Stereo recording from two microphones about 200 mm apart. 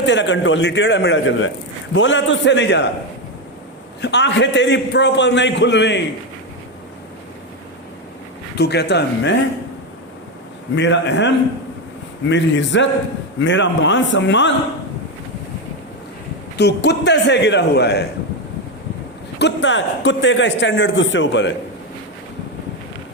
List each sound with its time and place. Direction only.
0.0 s a man's voice: 60° left (ahead or behind)
4.0 s a man's voice: 60° left (ahead or behind)
8.5 s a man's voice: 55° left (ahead or behind)
10.8 s a man's voice: 60° left (ahead or behind)
16.6 s a man's voice: 55° left (ahead or behind)
19.4 s a man's voice: 65° left (ahead or behind)